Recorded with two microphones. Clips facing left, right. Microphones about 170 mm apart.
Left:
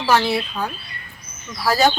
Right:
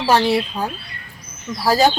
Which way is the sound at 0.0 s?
35° right (ahead or behind).